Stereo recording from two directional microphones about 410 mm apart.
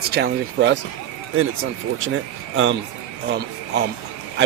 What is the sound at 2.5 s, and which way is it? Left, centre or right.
Speech, right.